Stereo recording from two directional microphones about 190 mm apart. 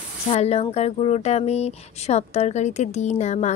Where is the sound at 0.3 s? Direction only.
35° left (ahead or behind).